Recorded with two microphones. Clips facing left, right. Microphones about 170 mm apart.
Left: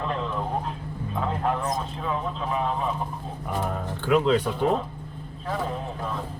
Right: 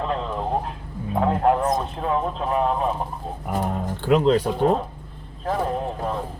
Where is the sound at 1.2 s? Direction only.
55° right (ahead or behind).